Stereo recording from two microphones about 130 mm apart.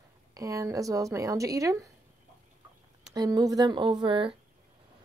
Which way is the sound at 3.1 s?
30° right (ahead or behind).